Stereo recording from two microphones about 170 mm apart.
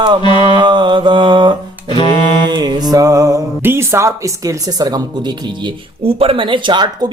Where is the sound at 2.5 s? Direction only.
25° right (ahead or behind).